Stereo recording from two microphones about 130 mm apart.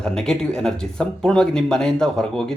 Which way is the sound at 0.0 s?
5° left (ahead or behind).